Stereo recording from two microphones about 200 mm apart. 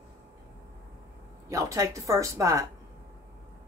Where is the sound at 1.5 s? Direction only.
15° right (ahead or behind).